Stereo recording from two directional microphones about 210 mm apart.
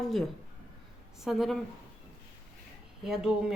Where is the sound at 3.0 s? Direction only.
5° right (ahead or behind).